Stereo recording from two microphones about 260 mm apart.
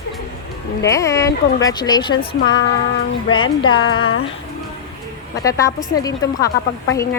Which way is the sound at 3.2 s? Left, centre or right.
Left.